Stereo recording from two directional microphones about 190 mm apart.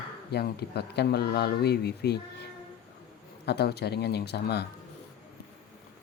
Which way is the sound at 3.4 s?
60° left (ahead or behind).